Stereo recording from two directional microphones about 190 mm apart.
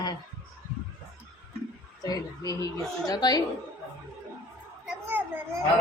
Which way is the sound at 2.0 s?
20° left (ahead or behind).